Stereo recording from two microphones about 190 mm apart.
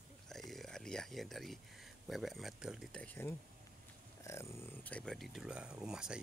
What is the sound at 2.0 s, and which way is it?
Speech, centre (ahead or behind).